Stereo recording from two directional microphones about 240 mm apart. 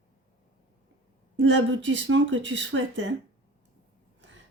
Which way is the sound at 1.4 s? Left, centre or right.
Right.